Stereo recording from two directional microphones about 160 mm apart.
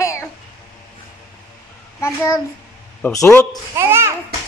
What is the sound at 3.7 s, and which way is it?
Babbling, 15° right (ahead or behind).